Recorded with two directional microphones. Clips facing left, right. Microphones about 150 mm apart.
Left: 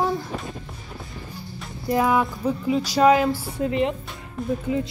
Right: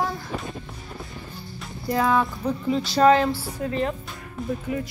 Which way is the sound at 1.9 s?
15° left (ahead or behind).